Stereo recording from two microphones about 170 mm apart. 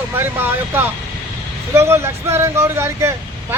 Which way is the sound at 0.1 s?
10° right (ahead or behind).